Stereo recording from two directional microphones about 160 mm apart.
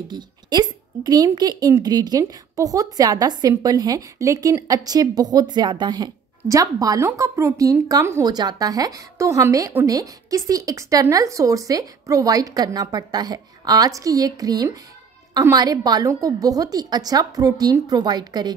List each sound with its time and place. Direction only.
0.1 s speech: 25° right (ahead or behind)